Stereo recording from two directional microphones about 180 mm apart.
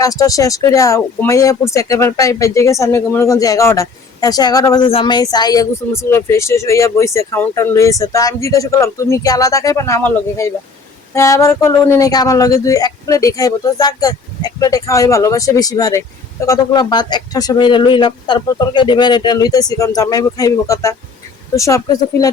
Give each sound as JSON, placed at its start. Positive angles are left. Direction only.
{"t": 0.0, "sound": "speech", "side_deg": 20}